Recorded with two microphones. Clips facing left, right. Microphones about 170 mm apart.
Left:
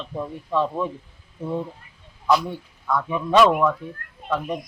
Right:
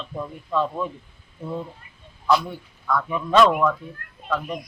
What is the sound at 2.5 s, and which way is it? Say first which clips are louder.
A man's voice: even; 15° left (ahead or behind).